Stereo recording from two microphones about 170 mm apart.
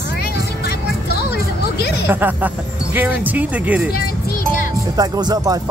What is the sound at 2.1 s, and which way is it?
Speech, 10° right (ahead or behind).